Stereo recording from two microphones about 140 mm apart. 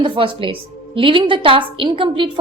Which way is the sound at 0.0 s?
40° right (ahead or behind).